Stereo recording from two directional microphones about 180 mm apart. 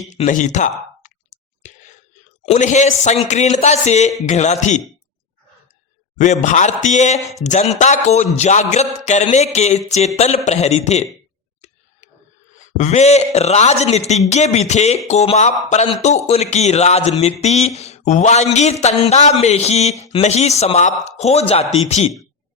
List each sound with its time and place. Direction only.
0.1 s clicking: 40° left (ahead or behind)
2.5 s a man's voice: 40° left (ahead or behind)
6.1 s a man's voice: 40° left (ahead or behind)
12.7 s a man's voice: 40° left (ahead or behind)